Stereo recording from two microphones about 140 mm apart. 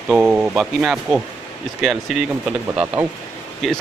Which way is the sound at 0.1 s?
5° right (ahead or behind).